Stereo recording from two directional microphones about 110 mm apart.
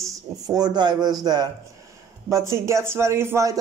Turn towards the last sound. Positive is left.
turn(degrees=-25)  # may be behind; listen again after turning